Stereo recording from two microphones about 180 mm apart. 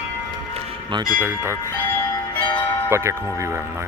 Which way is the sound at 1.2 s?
15° right (ahead or behind).